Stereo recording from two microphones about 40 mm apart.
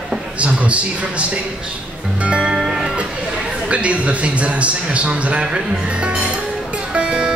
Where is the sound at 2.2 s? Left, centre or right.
Right.